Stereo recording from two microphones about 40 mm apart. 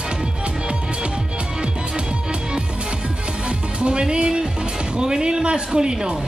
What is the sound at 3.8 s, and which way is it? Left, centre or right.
Music, right.